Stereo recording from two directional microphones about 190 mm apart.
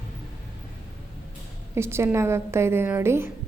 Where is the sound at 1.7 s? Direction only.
15° right (ahead or behind).